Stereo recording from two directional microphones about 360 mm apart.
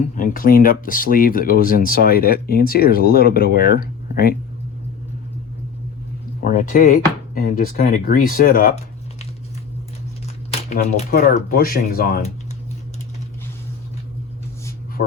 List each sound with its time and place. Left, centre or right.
0.0 s speech: left
6.4 s speech: left
10.5 s speech: centre